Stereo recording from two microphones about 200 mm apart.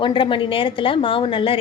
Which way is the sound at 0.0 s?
25° left (ahead or behind).